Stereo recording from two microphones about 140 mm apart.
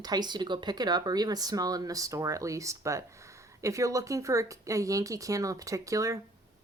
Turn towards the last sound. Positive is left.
turn(degrees=-25)  # may be behind; listen again after turning